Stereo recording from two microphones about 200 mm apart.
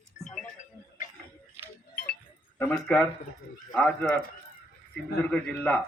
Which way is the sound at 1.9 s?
45° left (ahead or behind).